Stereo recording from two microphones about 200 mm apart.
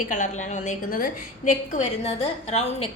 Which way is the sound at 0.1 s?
35° left (ahead or behind).